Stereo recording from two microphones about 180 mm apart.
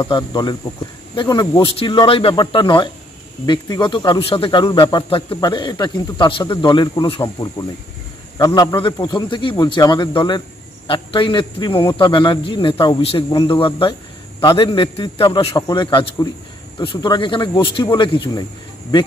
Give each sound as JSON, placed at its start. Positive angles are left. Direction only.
{"t": 0.0, "sound": "speech", "side_deg": 25}